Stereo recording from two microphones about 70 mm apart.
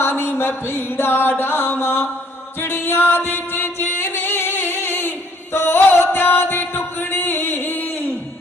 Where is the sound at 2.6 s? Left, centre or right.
Left.